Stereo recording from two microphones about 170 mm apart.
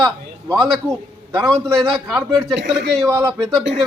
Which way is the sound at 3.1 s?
20° right (ahead or behind).